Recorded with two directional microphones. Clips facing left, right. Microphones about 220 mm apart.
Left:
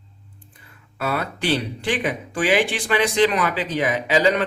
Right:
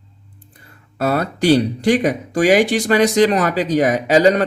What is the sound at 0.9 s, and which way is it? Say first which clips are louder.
Speech: right 7 dB; 40° right (ahead or behind).